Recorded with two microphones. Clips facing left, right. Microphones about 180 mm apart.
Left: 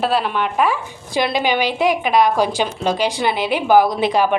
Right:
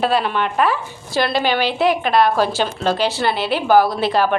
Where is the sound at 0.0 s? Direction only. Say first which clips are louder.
Right 1 dB; 5° left (ahead or behind).